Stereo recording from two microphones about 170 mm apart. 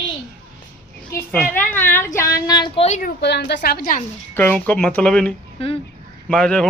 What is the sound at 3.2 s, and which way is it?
Speech, 80° left.